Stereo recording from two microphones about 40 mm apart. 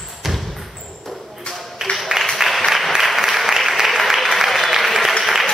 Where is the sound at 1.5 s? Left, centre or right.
Left.